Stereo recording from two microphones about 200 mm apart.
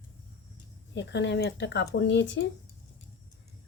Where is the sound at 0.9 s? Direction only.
60° left (ahead or behind).